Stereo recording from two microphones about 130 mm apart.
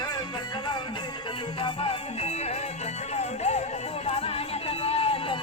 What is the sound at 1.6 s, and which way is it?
Music, 45° left (ahead or behind).